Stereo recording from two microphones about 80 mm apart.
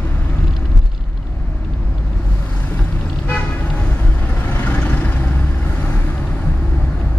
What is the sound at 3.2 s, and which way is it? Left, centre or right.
Toot, centre.